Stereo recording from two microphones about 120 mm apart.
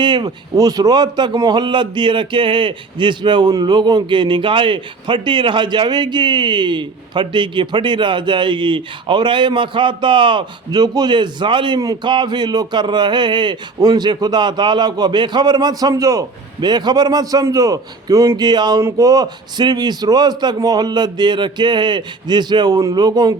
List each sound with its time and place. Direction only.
0.0 s a man's voice: 40° right (ahead or behind)
18.8 s a man's voice: 25° right (ahead or behind)